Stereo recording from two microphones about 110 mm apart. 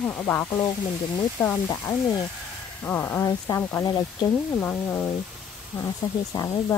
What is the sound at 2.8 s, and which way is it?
Speech, 15° left (ahead or behind).